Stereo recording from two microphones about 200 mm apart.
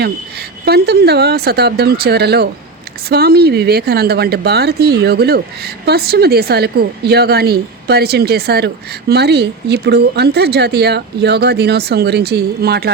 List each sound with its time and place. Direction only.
0.0 s speech: 50° right (ahead or behind)